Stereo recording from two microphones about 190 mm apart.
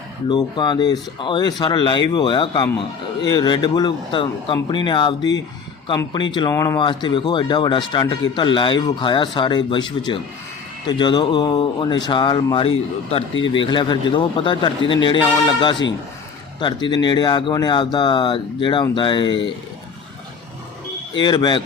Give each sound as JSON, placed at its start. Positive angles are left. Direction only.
{"t": 0.3, "sound": "speech", "side_deg": 25}
{"t": 21.2, "sound": "speech", "side_deg": 25}